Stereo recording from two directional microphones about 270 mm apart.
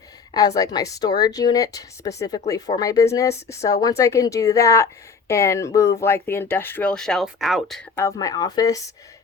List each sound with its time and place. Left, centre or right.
0.3 s speech: centre